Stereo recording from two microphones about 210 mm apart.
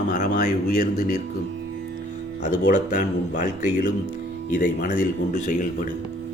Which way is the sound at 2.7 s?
40° left (ahead or behind).